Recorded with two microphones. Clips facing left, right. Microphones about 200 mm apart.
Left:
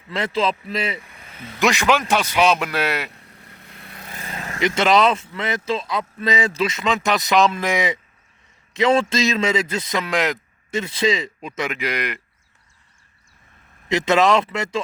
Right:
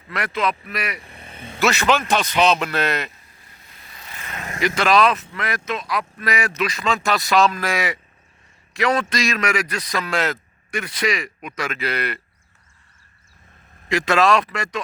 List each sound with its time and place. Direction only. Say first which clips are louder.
0.1 s a man's voice: left 2 dB; 25° left (ahead or behind)
1.0 s vehicle: right 1 dB; 30° right (ahead or behind)
1.5 s speech: left 1 dB; 15° left (ahead or behind)
3.1 s vehicle: left 6 dB; 65° left (ahead or behind)
4.1 s vehicle: left 2 dB; 35° left (ahead or behind)
4.6 s a man's voice: left 1 dB; 20° left (ahead or behind)
13.8 s a man's voice: left 1 dB; 20° left (ahead or behind)